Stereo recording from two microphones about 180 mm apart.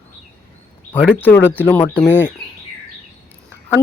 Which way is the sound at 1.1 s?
10° left (ahead or behind).